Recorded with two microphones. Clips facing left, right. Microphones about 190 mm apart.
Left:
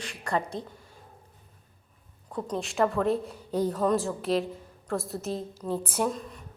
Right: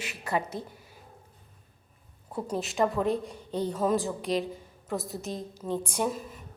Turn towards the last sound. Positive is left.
turn(degrees=-5)  # may be behind; listen again after turning